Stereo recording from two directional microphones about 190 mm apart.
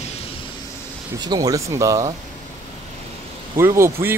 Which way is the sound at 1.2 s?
20° right (ahead or behind).